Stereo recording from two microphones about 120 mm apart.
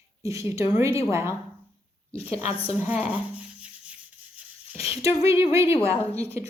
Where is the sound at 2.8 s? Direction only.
15° right (ahead or behind).